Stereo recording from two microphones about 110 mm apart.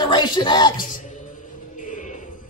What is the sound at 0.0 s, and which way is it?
Speech, 45° left (ahead or behind).